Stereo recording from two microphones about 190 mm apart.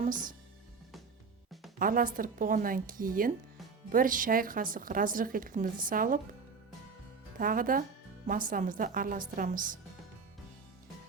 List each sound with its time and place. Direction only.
0.0 s speech: 45° right (ahead or behind)
1.8 s speech: 45° right (ahead or behind)
7.3 s speech: 45° right (ahead or behind)